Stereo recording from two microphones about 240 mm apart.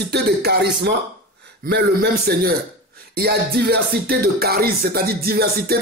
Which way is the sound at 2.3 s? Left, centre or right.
Right.